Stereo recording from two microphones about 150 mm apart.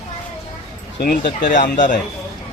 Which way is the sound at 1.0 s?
80° left.